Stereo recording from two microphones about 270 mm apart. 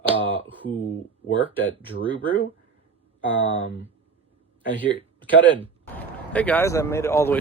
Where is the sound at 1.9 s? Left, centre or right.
Centre.